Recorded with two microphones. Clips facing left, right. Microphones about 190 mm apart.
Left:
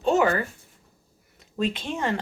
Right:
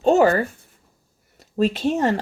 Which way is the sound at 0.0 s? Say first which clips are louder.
Right 6 dB; 40° right (ahead or behind).